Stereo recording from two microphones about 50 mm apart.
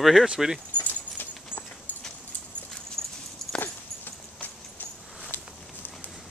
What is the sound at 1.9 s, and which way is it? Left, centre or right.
Dog, left.